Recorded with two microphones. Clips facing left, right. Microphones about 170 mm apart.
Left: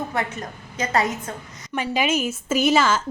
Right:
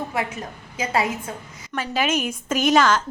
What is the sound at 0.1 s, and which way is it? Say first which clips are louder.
A woman's voice: even; 5° right (ahead or behind).